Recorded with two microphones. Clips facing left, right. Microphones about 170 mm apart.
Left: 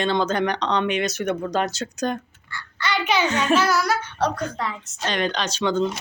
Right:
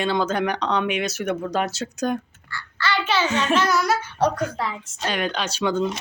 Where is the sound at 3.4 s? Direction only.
5° left (ahead or behind).